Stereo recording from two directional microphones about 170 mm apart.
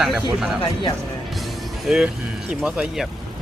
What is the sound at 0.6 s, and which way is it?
Speech, 25° left (ahead or behind).